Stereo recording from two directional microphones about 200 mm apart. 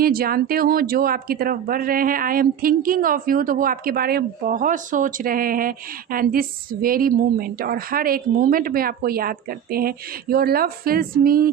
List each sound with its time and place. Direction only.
0.0 s speech: 50° right (ahead or behind)